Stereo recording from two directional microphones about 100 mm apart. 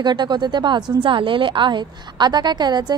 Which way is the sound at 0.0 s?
45° right (ahead or behind).